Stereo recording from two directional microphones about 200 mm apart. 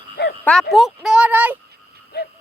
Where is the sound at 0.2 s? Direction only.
55° left (ahead or behind).